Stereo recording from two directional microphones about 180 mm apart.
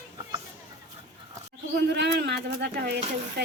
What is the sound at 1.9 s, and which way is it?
Speech, 70° right (ahead or behind).